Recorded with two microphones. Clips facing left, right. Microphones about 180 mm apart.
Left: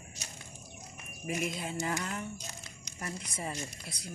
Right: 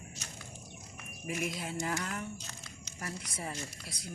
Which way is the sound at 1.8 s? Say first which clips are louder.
Left 1 dB; 5° left (ahead or behind).